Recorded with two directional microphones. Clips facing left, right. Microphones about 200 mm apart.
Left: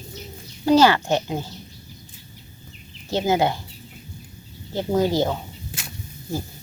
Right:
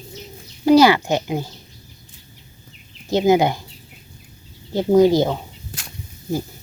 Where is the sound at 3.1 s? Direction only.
15° right (ahead or behind).